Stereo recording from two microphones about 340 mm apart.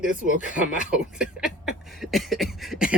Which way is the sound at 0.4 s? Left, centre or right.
Left.